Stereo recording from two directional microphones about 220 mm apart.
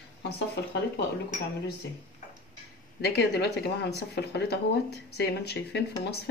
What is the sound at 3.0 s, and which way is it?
A woman's voice, 50° left (ahead or behind).